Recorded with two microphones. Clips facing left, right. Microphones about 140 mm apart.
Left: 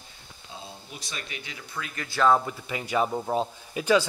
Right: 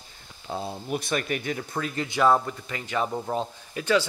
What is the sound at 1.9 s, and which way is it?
Speech, 20° right (ahead or behind).